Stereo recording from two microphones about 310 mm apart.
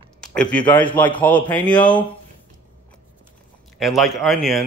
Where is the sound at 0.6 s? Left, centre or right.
Centre.